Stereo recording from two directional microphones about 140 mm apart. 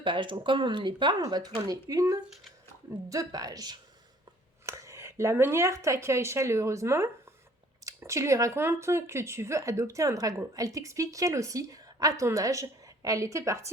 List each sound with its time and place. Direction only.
0.0 s speech: 35° right (ahead or behind)